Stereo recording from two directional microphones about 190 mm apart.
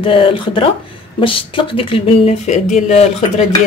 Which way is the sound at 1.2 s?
25° left (ahead or behind).